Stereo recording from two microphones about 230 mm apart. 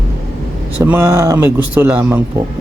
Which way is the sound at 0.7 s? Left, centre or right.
Centre.